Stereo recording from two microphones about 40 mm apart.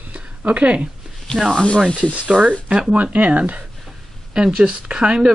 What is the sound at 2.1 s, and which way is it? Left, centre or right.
Speech, right.